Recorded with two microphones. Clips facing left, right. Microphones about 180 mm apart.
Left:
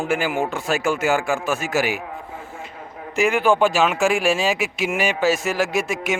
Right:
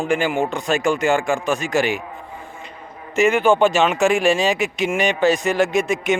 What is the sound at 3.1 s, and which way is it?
Speech, centre (ahead or behind).